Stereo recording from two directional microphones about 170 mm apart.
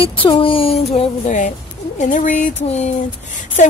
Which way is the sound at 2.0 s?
50° left (ahead or behind).